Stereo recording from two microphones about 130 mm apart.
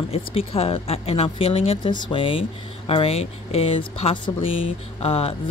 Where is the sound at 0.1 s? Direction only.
50° left (ahead or behind).